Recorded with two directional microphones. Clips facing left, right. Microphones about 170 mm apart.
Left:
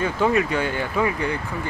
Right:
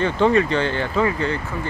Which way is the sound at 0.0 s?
10° left (ahead or behind).